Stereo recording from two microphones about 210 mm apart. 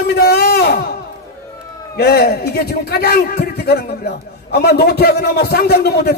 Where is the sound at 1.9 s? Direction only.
50° left (ahead or behind).